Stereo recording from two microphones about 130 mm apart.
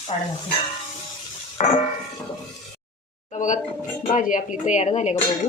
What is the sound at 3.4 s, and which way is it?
Speech, 75° left (ahead or behind).